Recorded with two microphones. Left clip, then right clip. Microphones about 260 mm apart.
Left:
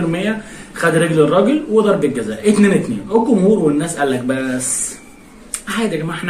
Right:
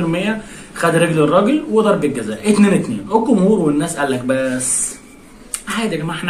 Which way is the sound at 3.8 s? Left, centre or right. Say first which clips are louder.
Left 1 dB; centre.